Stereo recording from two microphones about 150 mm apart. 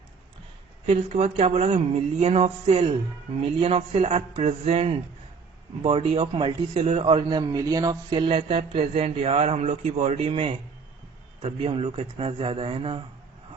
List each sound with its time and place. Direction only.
0.9 s a man's voice: 45° right (ahead or behind); by 8.3 s 30° right (ahead or behind)
8.3 s a man's voice: 45° right (ahead or behind)
11.6 s a man's voice: 40° right (ahead or behind)